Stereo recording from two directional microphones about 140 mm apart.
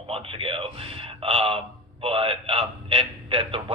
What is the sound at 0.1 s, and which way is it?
A man's voice, 40° right (ahead or behind).